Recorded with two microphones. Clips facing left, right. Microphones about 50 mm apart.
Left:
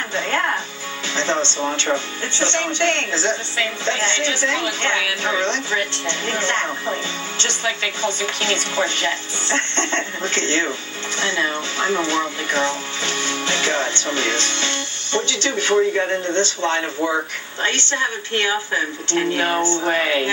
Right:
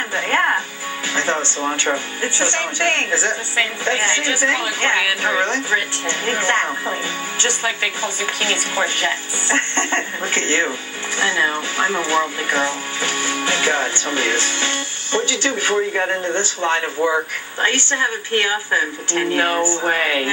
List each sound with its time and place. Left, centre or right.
0.1 s speech: centre